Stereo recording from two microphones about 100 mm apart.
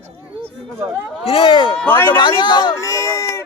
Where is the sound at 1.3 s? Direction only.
60° left (ahead or behind).